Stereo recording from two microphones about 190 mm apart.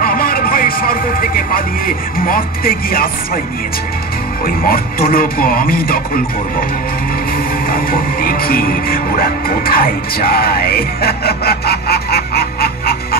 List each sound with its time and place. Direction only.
0.0 s speech: 50° left (ahead or behind)
4.5 s speech: 50° left (ahead or behind)
7.7 s music: 50° left (ahead or behind)